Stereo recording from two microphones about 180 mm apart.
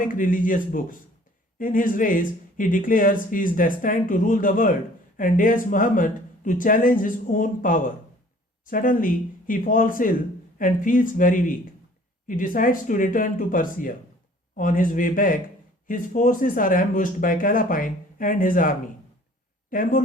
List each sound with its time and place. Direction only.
0.0 s speech: 50° left (ahead or behind)
19.7 s speech: 50° left (ahead or behind)